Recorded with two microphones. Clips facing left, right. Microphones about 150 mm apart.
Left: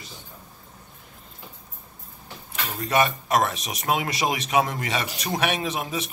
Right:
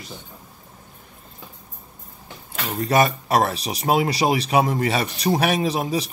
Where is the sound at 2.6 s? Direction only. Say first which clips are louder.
Right 4 dB; 35° right (ahead or behind).